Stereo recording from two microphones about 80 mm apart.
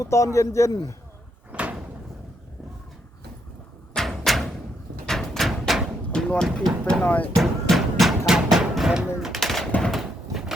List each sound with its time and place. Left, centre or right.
0.0 s a man's voice: left
1.5 s door: centre
3.9 s a sound: centre
6.1 s speech: centre
7.0 s speech: centre
7.4 s a sound: centre
8.3 s music: centre
9.2 s gunshot: centre
9.9 s horse: centre